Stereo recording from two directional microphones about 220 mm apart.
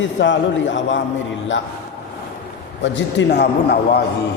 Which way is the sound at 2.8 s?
55° left (ahead or behind).